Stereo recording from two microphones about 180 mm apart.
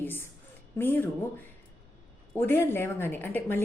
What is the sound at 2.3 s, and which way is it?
A woman's voice, 15° left (ahead or behind).